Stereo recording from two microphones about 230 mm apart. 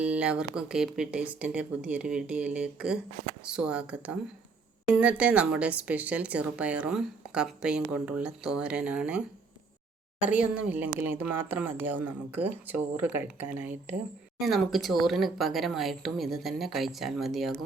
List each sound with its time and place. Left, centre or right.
0.0 s a woman's voice: centre
10.2 s a woman's voice: centre